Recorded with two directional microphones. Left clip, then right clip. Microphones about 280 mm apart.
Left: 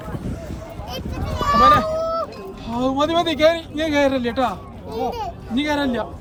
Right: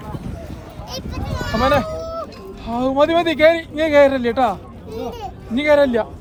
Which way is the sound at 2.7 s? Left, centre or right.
Right.